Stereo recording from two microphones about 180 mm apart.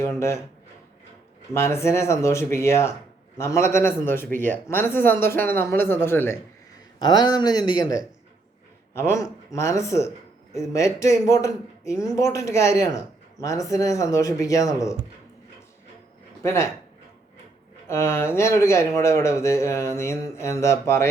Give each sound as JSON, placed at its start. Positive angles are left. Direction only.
{"t": 0.0, "sound": "speech", "side_deg": 15}
{"t": 1.5, "sound": "speech", "side_deg": 15}
{"t": 16.4, "sound": "speech", "side_deg": 15}
{"t": 17.8, "sound": "speech", "side_deg": 15}